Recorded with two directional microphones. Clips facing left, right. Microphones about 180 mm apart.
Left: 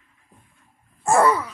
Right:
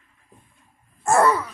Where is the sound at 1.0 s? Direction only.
10° left (ahead or behind).